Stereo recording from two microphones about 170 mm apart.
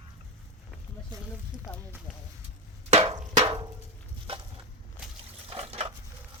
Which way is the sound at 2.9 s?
40° right (ahead or behind).